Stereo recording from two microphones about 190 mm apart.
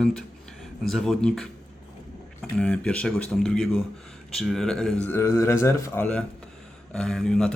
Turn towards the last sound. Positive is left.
turn(degrees=5)  # may be behind; listen again after turning